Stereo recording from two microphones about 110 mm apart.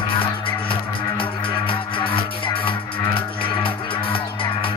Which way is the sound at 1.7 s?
50° left (ahead or behind).